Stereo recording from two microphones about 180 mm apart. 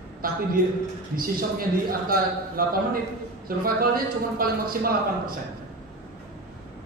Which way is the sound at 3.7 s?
55° right (ahead or behind).